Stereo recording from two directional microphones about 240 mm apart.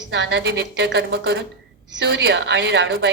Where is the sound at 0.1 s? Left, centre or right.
Right.